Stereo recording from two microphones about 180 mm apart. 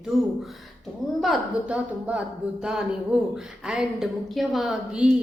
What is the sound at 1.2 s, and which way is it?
A woman's voice, centre (ahead or behind).